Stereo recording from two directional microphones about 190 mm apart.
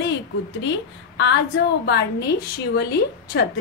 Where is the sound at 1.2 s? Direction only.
65° left (ahead or behind).